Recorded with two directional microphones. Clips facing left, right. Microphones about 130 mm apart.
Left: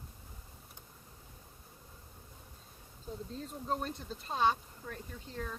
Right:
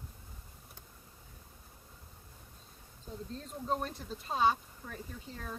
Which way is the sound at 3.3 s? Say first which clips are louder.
Right 2 dB; centre (ahead or behind).